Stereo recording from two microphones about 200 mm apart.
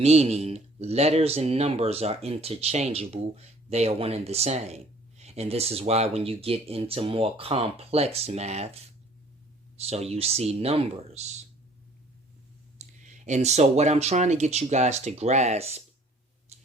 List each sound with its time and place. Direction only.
0.0 s speech: 30° right (ahead or behind)
12.8 s speech: 35° right (ahead or behind)